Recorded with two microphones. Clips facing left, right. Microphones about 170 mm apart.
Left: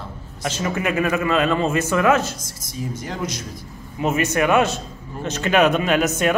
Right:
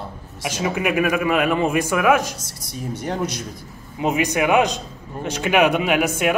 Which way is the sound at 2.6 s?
65° right (ahead or behind).